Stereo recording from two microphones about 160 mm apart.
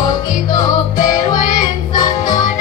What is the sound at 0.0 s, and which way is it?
Music, 25° left (ahead or behind).